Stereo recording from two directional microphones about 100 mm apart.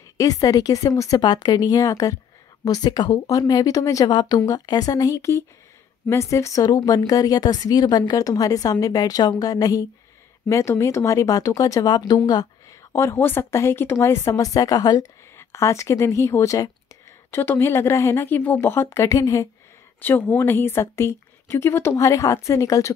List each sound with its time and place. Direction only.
0.2 s speech: 35° left (ahead or behind)
4.1 s speech: 50° left (ahead or behind)
12.9 s speech: 25° left (ahead or behind)
15.3 s speech: 30° left (ahead or behind)
17.3 s speech: 20° left (ahead or behind)
20.0 s speech: 20° left (ahead or behind)